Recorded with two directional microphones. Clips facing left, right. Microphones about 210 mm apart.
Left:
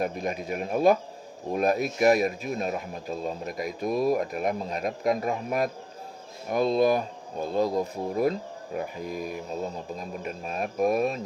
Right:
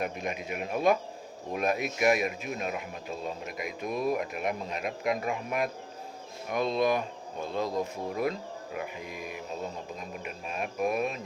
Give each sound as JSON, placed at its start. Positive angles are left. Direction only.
{"t": 0.0, "sound": "speech", "side_deg": 35}